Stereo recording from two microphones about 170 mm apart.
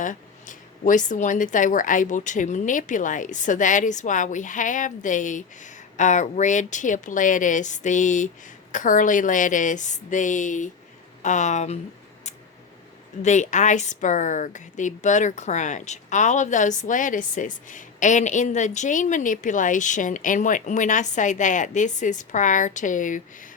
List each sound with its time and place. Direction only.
0.0 s speech: 50° left (ahead or behind)
13.2 s speech: 45° left (ahead or behind)